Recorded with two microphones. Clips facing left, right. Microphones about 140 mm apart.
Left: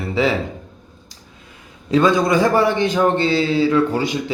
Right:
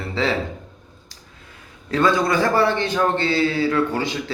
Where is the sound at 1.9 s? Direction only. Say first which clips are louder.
Left 4 dB; 15° left (ahead or behind).